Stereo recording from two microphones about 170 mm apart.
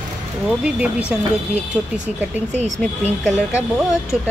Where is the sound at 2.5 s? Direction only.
40° right (ahead or behind).